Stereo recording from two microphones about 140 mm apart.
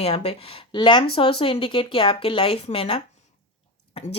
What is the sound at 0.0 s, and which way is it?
A woman's voice, 45° left (ahead or behind).